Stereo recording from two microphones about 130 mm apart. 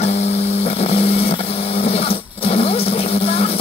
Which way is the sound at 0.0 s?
55° left (ahead or behind).